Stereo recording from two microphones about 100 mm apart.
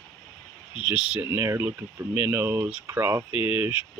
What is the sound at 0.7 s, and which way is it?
Speech, 10° right (ahead or behind).